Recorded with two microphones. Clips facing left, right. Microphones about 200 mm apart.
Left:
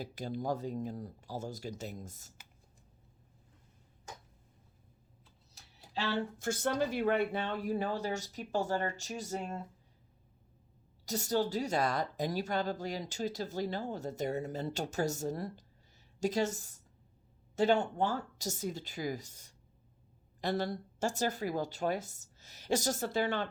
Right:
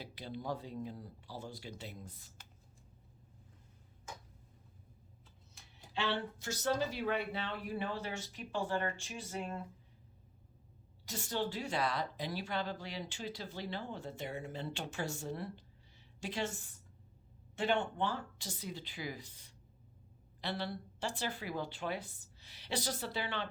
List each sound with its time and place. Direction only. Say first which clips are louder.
0.0 s a woman's voice: left 6 dB; 45° left (ahead or behind)
6.4 s speech: left 3 dB; 50° left (ahead or behind)
11.0 s a woman's voice: left 6 dB; 40° left (ahead or behind)